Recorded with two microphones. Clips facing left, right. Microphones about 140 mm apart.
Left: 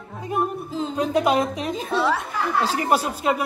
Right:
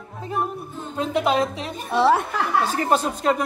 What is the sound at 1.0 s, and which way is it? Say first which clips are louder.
Speech: even; 15° left (ahead or behind).